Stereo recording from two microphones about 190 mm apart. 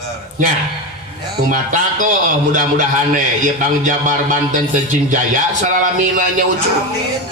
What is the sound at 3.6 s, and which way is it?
A man's voice, 45° right (ahead or behind).